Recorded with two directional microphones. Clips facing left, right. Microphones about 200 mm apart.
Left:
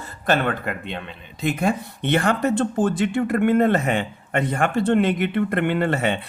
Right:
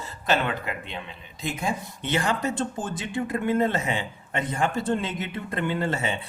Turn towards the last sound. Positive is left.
turn(degrees=65)  # may be behind; listen again after turning